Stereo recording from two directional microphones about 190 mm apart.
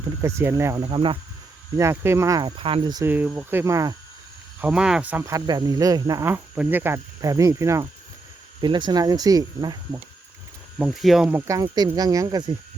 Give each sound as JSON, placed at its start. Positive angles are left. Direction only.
{"t": 0.2, "sound": "speech", "side_deg": -15}
{"t": 1.7, "sound": "speech", "side_deg": -15}
{"t": 3.1, "sound": "speech", "side_deg": -10}
{"t": 4.6, "sound": "speech", "side_deg": -5}
{"t": 10.8, "sound": "speech", "side_deg": 0}